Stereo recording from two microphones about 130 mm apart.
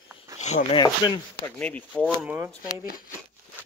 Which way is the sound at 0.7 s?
30° left (ahead or behind).